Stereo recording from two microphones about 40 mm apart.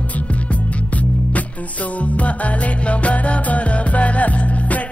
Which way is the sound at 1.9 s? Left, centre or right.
Left.